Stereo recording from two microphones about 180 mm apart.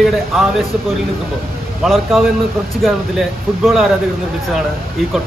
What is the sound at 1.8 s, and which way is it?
A man's voice, centre (ahead or behind).